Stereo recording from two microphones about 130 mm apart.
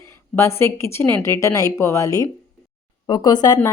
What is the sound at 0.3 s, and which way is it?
Speech, 20° left (ahead or behind).